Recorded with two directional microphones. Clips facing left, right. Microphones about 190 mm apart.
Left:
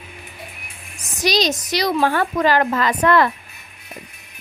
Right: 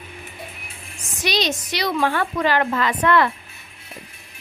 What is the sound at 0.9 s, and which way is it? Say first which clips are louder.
A woman's voice: left 4 dB; 40° left (ahead or behind).